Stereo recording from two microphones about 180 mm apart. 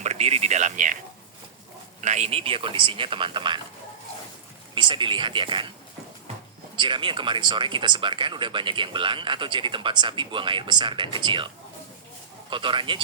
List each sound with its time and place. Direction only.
0.0 s speech: 35° right (ahead or behind)
2.0 s speech: 40° right (ahead or behind)
4.7 s speech: 25° right (ahead or behind)
6.7 s speech: 25° right (ahead or behind)
12.5 s speech: 25° right (ahead or behind)